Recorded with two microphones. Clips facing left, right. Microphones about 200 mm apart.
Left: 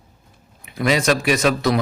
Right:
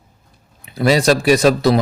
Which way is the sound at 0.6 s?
35° right (ahead or behind).